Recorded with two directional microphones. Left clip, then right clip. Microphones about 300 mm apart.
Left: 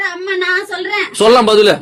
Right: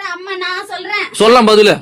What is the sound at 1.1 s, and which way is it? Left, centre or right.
Speech, right.